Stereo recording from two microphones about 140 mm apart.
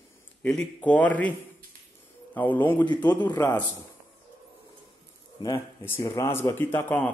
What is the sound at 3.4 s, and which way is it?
Speech, 15° left (ahead or behind).